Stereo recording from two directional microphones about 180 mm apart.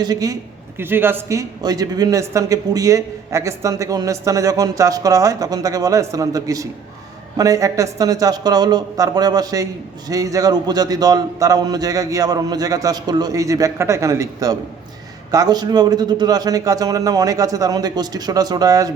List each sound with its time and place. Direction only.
0.0 s a man's voice: 20° right (ahead or behind)